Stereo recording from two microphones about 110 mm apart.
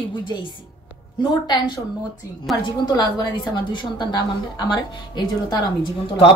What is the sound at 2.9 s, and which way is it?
A woman's voice, 40° left (ahead or behind).